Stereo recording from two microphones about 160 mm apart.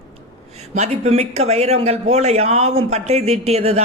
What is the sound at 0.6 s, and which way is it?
Speech, 45° right (ahead or behind).